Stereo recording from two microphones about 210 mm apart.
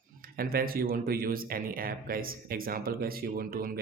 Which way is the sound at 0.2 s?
45° right (ahead or behind).